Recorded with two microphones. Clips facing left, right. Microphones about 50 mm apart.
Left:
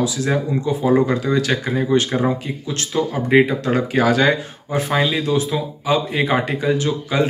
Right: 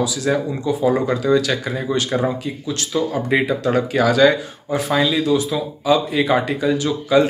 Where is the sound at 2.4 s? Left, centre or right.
Left.